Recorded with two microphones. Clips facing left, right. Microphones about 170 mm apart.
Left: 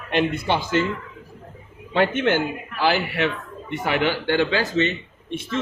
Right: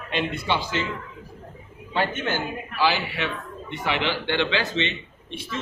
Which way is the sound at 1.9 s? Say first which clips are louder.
Left 6 dB; 60° left (ahead or behind).